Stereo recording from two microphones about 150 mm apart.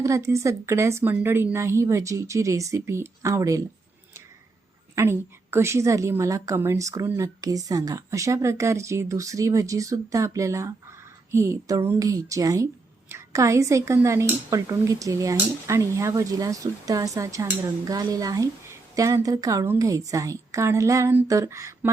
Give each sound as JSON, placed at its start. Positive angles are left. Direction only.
{"t": 0.0, "sound": "speech", "side_deg": -20}
{"t": 4.9, "sound": "speech", "side_deg": -15}